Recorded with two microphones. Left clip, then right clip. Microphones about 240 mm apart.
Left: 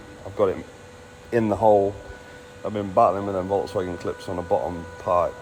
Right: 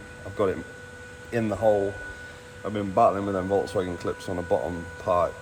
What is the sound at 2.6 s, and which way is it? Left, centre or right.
Speech, centre.